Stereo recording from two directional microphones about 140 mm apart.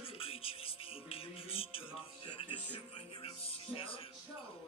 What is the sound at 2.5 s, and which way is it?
Music, 10° right (ahead or behind).